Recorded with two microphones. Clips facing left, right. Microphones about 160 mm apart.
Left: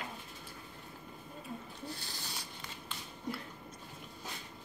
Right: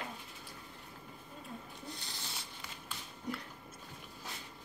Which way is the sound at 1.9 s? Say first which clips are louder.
Left 2 dB; 20° right (ahead or behind).